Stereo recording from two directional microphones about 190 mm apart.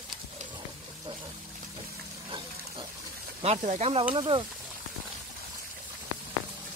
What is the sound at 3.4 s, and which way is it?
Speech, 35° right (ahead or behind).